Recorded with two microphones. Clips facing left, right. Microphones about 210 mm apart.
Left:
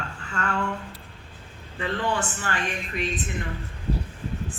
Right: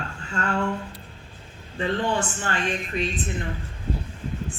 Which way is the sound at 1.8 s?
25° right (ahead or behind).